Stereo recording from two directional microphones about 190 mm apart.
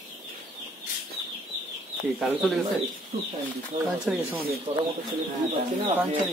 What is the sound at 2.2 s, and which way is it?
Speech, centre (ahead or behind).